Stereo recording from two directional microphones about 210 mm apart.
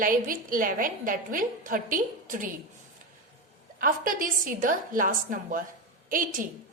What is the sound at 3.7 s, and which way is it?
A woman's voice, 40° right (ahead or behind).